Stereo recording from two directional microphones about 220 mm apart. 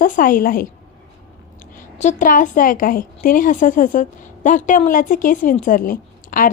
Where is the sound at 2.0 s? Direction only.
35° left (ahead or behind).